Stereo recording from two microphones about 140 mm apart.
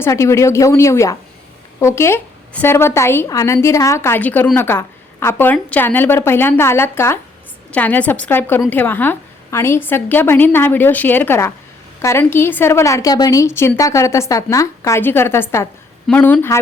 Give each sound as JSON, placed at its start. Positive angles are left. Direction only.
{"t": 0.0, "sound": "a woman's voice", "side_deg": 20}